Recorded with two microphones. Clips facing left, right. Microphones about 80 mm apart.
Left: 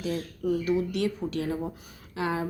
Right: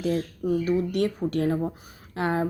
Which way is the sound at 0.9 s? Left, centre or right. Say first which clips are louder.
Right 4 dB; right.